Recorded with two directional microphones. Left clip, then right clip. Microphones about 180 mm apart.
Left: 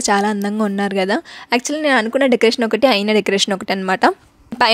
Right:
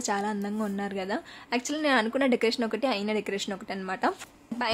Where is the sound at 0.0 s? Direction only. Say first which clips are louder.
Left 13 dB; 50° left (ahead or behind).